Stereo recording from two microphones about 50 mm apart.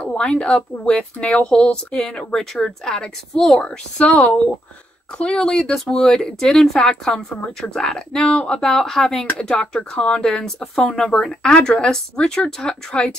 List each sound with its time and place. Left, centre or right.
0.0 s a woman's voice: left